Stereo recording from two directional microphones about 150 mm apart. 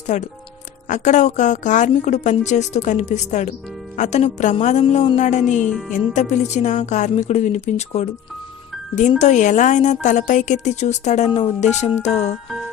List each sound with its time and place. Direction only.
0.1 s a woman's voice: 55° left (ahead or behind)